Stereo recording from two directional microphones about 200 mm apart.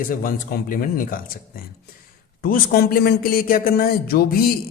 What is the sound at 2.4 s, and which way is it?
Speech, 45° left (ahead or behind).